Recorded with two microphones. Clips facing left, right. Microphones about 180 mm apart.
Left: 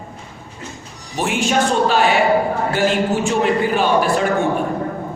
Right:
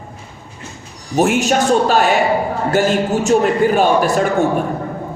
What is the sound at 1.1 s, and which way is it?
A man's voice, 45° right (ahead or behind).